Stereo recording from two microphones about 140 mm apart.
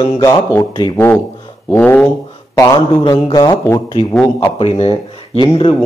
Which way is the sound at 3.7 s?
20° left (ahead or behind).